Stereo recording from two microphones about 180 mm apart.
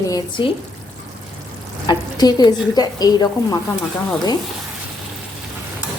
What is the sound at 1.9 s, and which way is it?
A woman's voice, 20° left (ahead or behind).